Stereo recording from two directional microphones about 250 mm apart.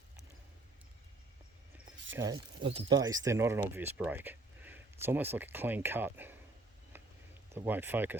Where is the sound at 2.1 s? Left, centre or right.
Centre.